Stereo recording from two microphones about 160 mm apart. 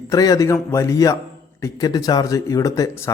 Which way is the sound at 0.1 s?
20° left (ahead or behind).